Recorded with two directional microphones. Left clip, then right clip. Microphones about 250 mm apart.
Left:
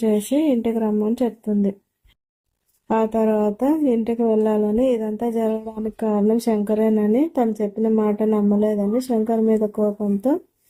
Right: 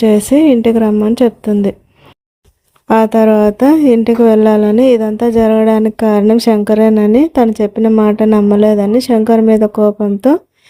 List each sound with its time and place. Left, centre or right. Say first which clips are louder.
0.0 s a woman's voice: right 11 dB; right
2.8 s a woman's voice: right 11 dB; right